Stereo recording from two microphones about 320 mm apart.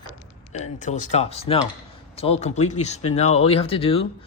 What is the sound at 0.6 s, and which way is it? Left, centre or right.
Speech, left.